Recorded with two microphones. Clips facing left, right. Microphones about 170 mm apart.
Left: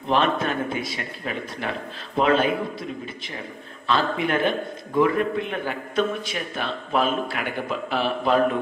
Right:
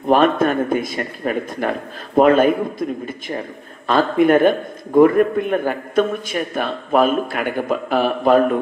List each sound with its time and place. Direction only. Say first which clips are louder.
0.0 s speech: right 7 dB; 50° right (ahead or behind)